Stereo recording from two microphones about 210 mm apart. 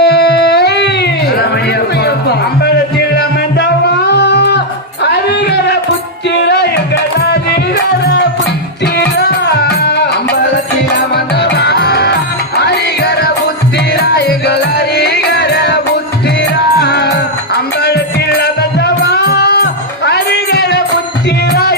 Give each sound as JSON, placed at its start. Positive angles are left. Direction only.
{"t": 0.0, "sound": "music", "side_deg": 50}
{"t": 3.2, "sound": "music", "side_deg": 50}
{"t": 5.1, "sound": "a sound", "side_deg": 50}
{"t": 6.4, "sound": "music", "side_deg": 55}
{"t": 9.0, "sound": "music", "side_deg": 50}